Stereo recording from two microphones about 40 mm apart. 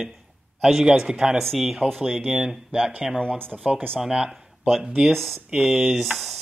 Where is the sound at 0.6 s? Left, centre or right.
Centre.